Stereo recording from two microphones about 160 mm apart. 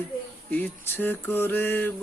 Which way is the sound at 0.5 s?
10° left (ahead or behind).